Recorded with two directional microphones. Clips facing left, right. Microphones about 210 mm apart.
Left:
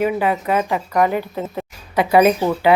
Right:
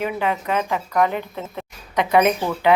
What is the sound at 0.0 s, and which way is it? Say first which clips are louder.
Speech: left 5 dB; 5° left (ahead or behind).